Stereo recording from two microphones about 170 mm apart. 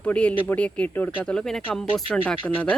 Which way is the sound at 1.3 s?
5° left (ahead or behind).